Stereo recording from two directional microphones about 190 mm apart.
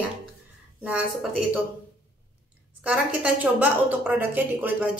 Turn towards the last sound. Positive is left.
turn(degrees=-10)  # may be behind; listen again after turning